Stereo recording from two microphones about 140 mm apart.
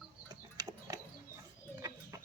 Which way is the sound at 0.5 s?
30° right (ahead or behind).